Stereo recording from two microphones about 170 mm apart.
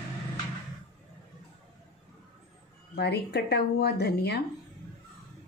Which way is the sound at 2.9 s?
75° left (ahead or behind).